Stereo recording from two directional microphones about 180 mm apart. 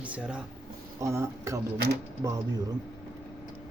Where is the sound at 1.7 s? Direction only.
65° right (ahead or behind).